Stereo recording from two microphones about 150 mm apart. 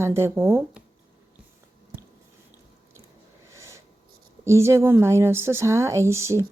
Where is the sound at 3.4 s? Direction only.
20° right (ahead or behind).